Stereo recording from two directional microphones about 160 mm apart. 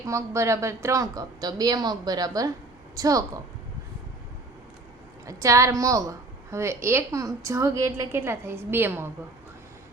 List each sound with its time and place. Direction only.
0.0 s a woman's voice: 20° right (ahead or behind)
5.2 s a woman's voice: 20° right (ahead or behind)